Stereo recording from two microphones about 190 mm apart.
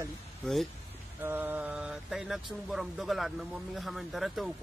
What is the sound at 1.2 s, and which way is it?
Mantra, 10° right (ahead or behind).